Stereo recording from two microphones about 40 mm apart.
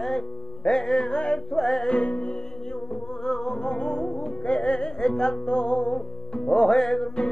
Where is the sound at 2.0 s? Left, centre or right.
Left.